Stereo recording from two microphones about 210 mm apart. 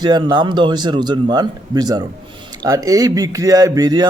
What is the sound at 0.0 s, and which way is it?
Speech, 20° right (ahead or behind).